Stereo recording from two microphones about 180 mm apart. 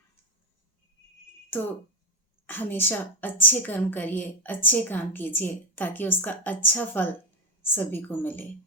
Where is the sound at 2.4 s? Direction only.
10° left (ahead or behind).